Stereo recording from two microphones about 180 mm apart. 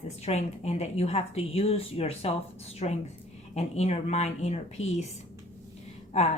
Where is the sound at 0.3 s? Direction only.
35° left (ahead or behind).